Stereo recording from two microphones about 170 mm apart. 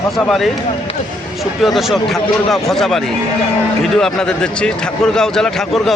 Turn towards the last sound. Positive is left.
turn(degrees=5)  # may be behind; listen again after turning